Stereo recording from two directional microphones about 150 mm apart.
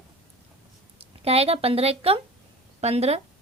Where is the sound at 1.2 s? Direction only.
40° right (ahead or behind).